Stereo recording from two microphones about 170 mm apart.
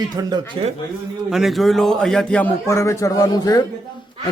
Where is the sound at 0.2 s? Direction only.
25° right (ahead or behind).